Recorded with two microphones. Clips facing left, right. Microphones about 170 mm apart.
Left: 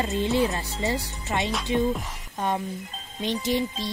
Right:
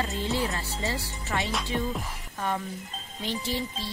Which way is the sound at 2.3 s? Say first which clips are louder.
Left 4 dB; 20° left (ahead or behind).